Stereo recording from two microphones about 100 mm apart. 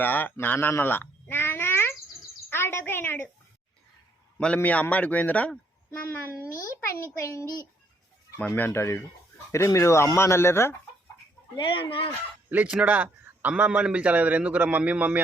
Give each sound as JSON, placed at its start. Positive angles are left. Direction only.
{"t": 0.0, "sound": "babbling", "side_deg": 20}
{"t": 2.5, "sound": "a sound", "side_deg": 25}
{"t": 4.4, "sound": "a man's voice", "side_deg": 10}
{"t": 7.2, "sound": "a child's voice", "side_deg": 30}
{"t": 8.4, "sound": "speech", "side_deg": 15}
{"t": 11.5, "sound": "speech", "side_deg": 55}
{"t": 12.5, "sound": "a man's voice", "side_deg": -15}